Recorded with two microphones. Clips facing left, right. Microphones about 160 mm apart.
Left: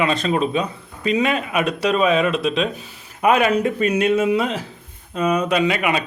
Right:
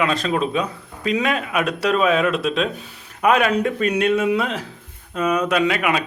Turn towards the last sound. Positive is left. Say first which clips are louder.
# even
turn(degrees=0)  # may be behind; listen again after turning